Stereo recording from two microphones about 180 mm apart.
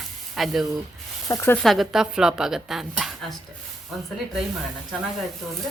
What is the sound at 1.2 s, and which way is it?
Speech, 15° left (ahead or behind).